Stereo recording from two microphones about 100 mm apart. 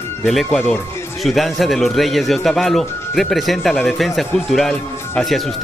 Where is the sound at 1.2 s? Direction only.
Centre (ahead or behind).